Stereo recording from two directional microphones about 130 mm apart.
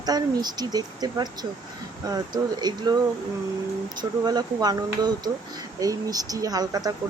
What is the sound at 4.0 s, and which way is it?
A woman's voice, 30° right (ahead or behind).